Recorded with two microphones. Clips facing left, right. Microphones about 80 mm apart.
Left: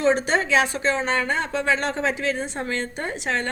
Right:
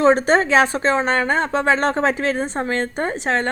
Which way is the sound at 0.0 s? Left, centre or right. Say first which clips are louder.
Right 6 dB; right.